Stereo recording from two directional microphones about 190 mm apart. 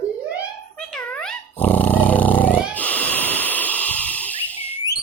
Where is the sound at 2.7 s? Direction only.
10° left (ahead or behind).